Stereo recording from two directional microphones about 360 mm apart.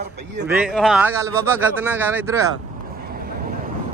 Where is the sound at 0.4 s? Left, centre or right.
Centre.